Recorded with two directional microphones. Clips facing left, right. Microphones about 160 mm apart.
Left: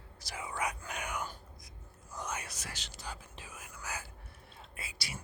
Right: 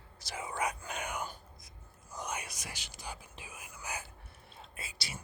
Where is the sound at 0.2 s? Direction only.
25° right (ahead or behind).